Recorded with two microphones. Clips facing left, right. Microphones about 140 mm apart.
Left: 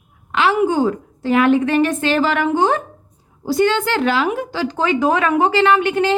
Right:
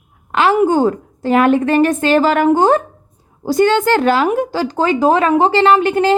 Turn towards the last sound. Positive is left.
turn(degrees=-40)  # may be behind; listen again after turning